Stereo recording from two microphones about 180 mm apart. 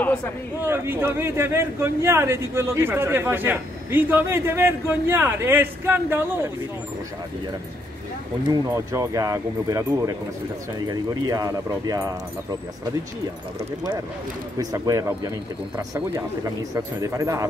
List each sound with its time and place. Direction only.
0.6 s a man's voice: 10° right (ahead or behind)
8.5 s a man's voice: 20° right (ahead or behind)
14.6 s speech: 20° right (ahead or behind)
16.7 s a man's voice: 15° right (ahead or behind)